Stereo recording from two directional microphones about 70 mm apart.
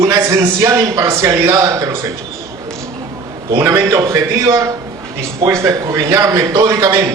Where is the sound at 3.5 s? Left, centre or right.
Right.